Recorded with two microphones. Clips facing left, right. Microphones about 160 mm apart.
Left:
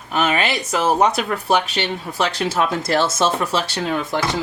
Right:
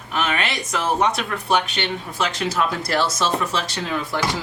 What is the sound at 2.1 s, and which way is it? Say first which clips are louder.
Speech: left 3 dB; 35° left (ahead or behind).